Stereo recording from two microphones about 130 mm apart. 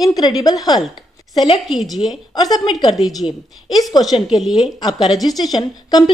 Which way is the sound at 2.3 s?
30° left (ahead or behind).